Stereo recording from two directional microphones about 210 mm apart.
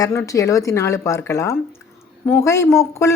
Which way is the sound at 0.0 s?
15° left (ahead or behind).